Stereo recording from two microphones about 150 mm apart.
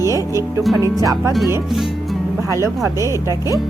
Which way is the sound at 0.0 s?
20° right (ahead or behind).